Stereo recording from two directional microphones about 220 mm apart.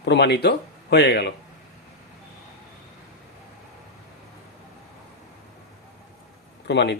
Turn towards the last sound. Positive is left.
turn(degrees=50)  # may be behind; listen again after turning